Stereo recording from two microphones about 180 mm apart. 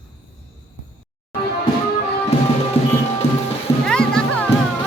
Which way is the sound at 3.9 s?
5° left (ahead or behind).